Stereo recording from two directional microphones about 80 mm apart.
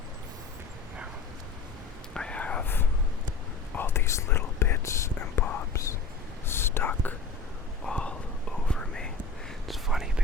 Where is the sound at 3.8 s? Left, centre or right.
Left.